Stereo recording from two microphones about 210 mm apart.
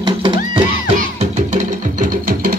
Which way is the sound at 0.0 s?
20° right (ahead or behind).